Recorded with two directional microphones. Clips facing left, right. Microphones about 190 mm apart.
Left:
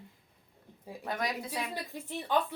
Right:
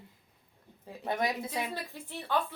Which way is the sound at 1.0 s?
25° right (ahead or behind).